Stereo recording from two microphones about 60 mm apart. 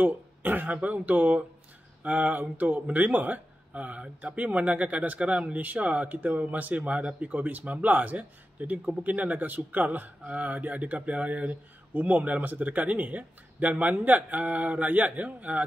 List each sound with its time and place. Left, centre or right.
0.0 s a man's voice: right